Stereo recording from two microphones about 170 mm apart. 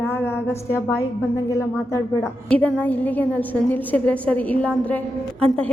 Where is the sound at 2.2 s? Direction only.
5° left (ahead or behind).